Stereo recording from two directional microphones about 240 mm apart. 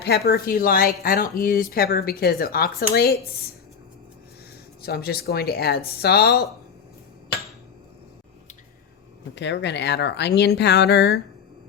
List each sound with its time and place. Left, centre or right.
0.0 s speech: left
4.8 s speech: left
9.3 s speech: left